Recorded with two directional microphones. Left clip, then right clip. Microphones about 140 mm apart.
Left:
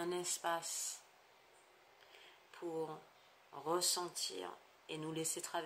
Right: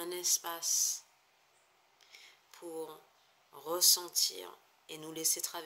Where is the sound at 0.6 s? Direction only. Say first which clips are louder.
Right 12 dB; 45° left (ahead or behind).